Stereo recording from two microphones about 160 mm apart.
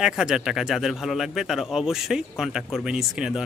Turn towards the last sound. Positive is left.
turn(degrees=-5)  # may be behind; listen again after turning